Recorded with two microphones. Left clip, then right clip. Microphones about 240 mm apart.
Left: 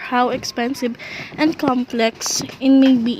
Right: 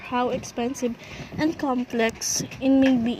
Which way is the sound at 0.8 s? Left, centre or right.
Left.